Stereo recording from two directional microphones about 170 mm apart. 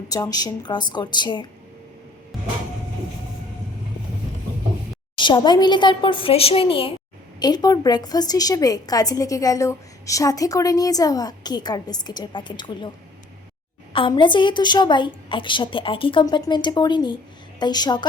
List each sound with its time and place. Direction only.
0.1 s a woman's voice: 20° left (ahead or behind)
5.1 s a woman's voice: 30° left (ahead or behind)
13.9 s a woman's voice: 30° left (ahead or behind)